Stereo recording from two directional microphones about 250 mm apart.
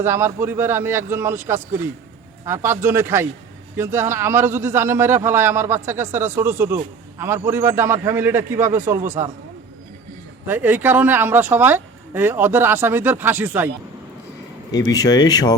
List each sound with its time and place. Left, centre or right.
0.0 s speech: centre
10.4 s speech: centre
14.7 s speech: centre